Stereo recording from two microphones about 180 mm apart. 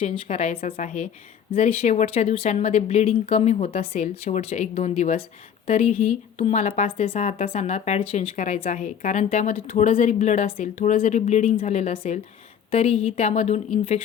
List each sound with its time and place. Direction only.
0.0 s a woman's voice: 35° left (ahead or behind)